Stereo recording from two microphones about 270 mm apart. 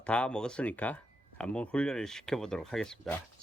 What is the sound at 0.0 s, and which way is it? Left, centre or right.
Speech, centre.